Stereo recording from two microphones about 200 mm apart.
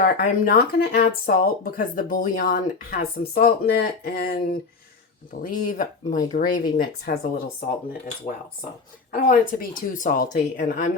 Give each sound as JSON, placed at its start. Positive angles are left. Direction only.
{"t": 0.0, "sound": "speech", "side_deg": 50}
{"t": 9.1, "sound": "speech", "side_deg": 45}